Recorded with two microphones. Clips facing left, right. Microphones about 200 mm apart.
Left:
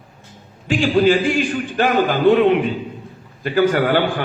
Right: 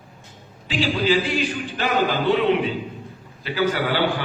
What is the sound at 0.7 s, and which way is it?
A man's voice, 50° left (ahead or behind).